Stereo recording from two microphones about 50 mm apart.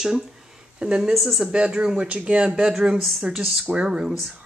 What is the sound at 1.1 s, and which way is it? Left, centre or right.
Speech, centre.